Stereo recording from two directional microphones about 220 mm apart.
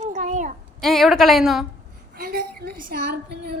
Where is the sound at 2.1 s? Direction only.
40° right (ahead or behind).